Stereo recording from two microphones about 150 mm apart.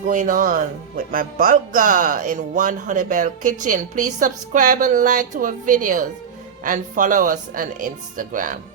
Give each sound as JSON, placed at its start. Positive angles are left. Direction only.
{"t": 0.1, "sound": "speech", "side_deg": -60}